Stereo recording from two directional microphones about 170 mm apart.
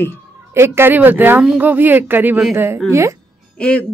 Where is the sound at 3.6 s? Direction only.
5° left (ahead or behind).